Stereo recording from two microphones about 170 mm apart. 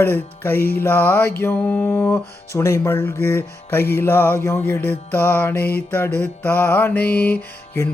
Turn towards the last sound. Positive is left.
turn(degrees=10)  # may be behind; listen again after turning